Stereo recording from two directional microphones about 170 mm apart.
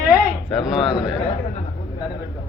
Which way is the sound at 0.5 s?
Centre (ahead or behind).